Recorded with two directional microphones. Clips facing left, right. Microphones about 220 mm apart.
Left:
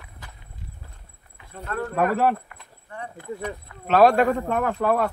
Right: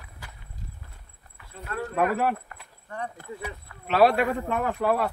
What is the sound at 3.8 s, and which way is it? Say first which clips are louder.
Speech: left 4 dB; 45° left (ahead or behind).